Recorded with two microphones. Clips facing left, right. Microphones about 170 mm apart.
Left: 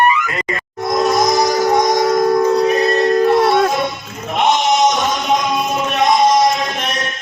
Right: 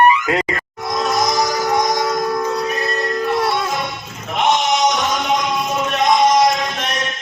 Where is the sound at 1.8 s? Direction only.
20° left (ahead or behind).